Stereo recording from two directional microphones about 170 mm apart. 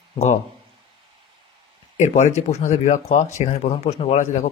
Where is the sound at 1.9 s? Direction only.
45° left (ahead or behind).